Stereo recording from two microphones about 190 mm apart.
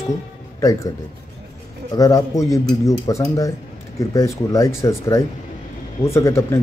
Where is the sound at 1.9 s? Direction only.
20° left (ahead or behind).